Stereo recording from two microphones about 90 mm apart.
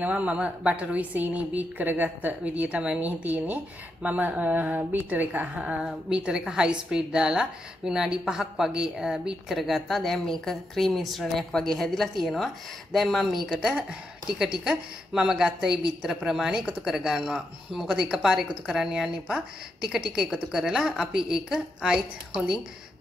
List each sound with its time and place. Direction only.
0.0 s a woman's voice: 15° right (ahead or behind)